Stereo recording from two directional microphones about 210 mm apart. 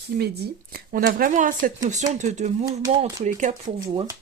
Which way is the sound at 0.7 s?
40° right (ahead or behind).